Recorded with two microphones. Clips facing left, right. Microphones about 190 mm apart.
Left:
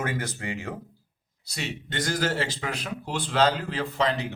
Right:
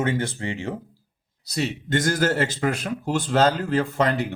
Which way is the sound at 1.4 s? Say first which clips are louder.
Right 8 dB; 40° right (ahead or behind).